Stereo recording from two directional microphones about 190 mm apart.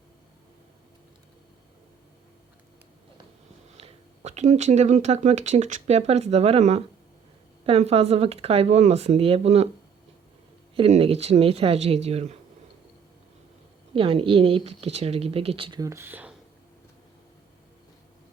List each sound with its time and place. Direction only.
3.8 s speech: 35° right (ahead or behind)
10.8 s speech: 35° right (ahead or behind)
13.9 s speech: 30° right (ahead or behind); by 16.3 s 10° right (ahead or behind)